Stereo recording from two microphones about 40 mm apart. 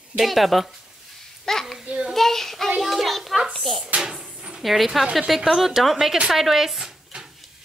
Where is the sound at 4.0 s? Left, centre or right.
Centre.